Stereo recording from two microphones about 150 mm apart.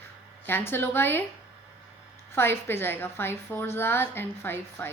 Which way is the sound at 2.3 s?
15° left (ahead or behind).